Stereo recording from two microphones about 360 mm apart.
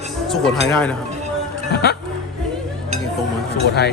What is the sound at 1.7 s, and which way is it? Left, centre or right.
Speech, left.